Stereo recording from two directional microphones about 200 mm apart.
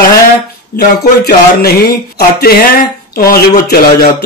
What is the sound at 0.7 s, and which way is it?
Speech, 50° left (ahead or behind).